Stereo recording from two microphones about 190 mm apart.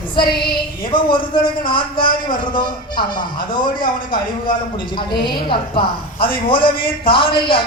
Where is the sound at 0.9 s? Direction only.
25° left (ahead or behind).